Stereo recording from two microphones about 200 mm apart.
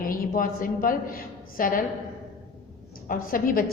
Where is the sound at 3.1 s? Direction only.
45° left (ahead or behind).